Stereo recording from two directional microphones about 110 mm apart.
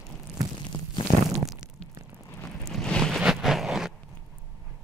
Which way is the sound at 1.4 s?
5° right (ahead or behind).